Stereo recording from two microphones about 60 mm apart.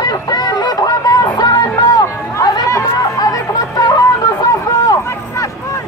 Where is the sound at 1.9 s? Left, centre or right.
Left.